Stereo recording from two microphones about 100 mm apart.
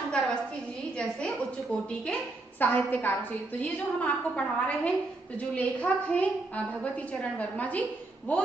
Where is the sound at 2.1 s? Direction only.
20° left (ahead or behind).